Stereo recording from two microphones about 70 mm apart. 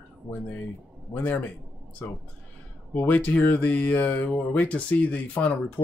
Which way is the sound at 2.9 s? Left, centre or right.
Left.